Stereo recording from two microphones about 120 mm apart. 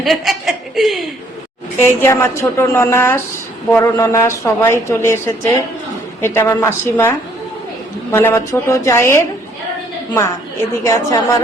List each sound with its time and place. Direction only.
0.0 s a woman's voice: centre (ahead or behind)
1.8 s speech: 20° left (ahead or behind)
10.8 s speech: 25° left (ahead or behind)